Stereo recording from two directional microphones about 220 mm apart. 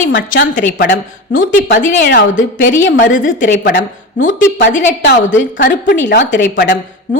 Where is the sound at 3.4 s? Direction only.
50° left (ahead or behind).